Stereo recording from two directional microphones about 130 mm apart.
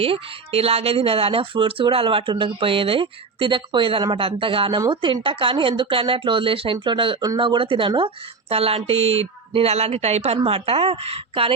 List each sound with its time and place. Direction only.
0.0 s speech: 50° right (ahead or behind)